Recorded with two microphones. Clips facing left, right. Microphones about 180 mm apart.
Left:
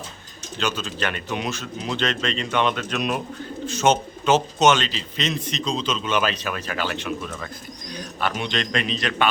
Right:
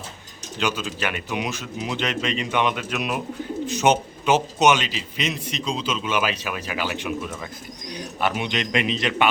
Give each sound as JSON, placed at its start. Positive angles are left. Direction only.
{"t": 0.6, "sound": "a man's voice", "side_deg": -10}